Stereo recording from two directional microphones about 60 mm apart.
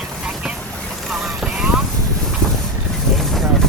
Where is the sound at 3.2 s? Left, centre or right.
Centre.